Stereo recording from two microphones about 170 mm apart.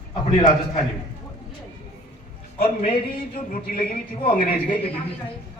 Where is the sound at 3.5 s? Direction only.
55° left (ahead or behind).